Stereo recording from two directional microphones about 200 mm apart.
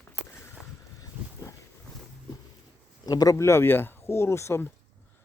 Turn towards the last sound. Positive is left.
turn(degrees=15)  # may be behind; listen again after turning